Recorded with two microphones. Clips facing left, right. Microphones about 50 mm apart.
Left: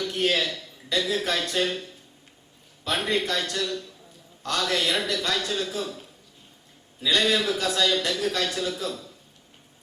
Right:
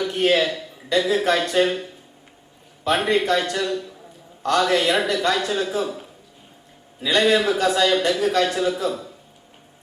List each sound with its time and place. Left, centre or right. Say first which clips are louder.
0.0 s a man's voice: right 6 dB; centre
7.1 s a man's voice: right 5 dB; centre